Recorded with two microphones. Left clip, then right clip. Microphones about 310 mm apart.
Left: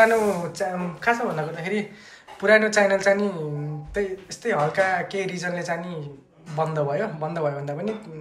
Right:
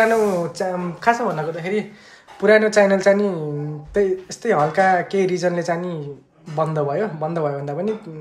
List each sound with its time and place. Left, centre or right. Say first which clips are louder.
0.0 s speech: right 2 dB; centre